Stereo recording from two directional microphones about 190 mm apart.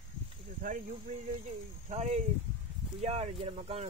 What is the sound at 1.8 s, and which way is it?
Speech, 35° right (ahead or behind).